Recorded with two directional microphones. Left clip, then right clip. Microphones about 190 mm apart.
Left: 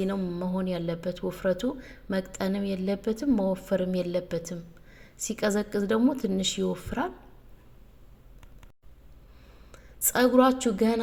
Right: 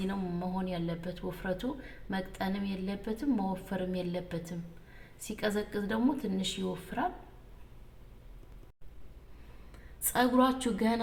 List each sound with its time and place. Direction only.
0.1 s speech: 35° left (ahead or behind)
10.0 s speech: 40° left (ahead or behind)